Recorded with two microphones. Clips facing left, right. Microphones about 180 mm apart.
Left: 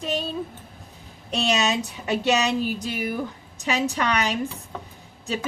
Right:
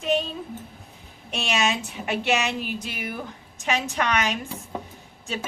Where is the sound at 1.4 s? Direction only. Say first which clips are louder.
Left 2 dB; 35° left (ahead or behind).